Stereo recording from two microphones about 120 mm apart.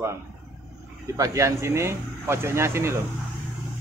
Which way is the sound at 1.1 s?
25° right (ahead or behind).